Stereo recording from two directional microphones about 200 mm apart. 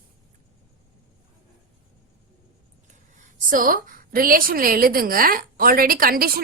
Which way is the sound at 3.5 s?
45° right (ahead or behind).